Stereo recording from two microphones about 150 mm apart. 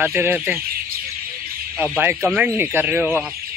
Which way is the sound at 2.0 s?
15° right (ahead or behind).